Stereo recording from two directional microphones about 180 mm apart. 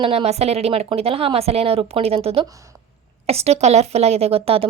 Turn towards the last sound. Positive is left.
turn(degrees=-30)  # may be behind; listen again after turning